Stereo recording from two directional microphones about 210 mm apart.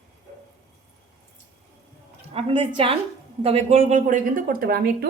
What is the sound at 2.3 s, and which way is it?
A woman's voice, 25° right (ahead or behind).